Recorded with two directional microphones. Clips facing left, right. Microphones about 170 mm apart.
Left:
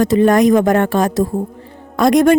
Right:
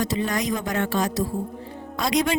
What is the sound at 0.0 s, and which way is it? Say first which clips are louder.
A woman's voice: left 14 dB; 55° left (ahead or behind).